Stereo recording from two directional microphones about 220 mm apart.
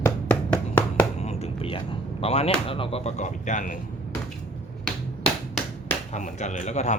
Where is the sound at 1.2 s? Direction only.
30° left (ahead or behind).